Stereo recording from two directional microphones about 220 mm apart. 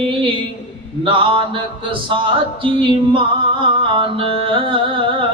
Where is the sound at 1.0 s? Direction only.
25° right (ahead or behind).